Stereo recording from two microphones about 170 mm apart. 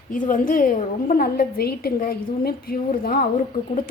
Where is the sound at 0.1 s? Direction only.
50° left (ahead or behind).